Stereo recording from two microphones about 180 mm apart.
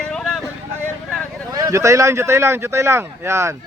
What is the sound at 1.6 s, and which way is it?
Speech, 15° right (ahead or behind).